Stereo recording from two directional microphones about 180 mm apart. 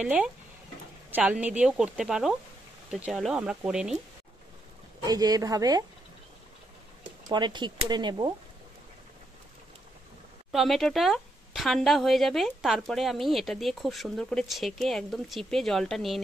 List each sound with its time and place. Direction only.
0.0 s a woman's voice: 5° right (ahead or behind)
5.0 s speech: 20° right (ahead or behind)
7.2 s speech: 25° right (ahead or behind)
10.5 s a woman's voice: centre (ahead or behind)